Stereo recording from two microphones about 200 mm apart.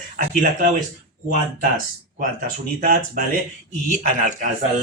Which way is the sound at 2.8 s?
45° right (ahead or behind).